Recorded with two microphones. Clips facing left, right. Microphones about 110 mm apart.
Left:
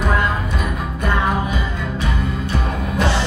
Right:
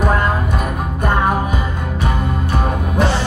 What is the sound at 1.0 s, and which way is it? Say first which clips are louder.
Music: right 3 dB; 45° right (ahead or behind).